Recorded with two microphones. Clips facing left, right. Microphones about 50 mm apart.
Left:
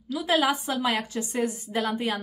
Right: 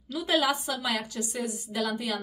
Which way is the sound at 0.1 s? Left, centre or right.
Centre.